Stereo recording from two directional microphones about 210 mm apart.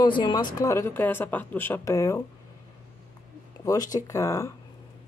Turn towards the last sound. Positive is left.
turn(degrees=15)  # may be behind; listen again after turning